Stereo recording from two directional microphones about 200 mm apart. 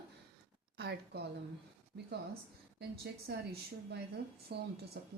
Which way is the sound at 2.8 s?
55° right (ahead or behind).